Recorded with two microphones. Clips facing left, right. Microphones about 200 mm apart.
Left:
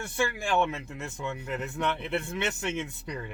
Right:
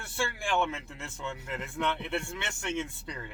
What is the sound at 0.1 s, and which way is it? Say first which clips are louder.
Speech: left 3 dB; 20° left (ahead or behind).